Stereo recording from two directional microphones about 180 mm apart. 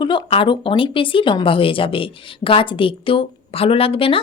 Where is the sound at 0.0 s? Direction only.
25° left (ahead or behind).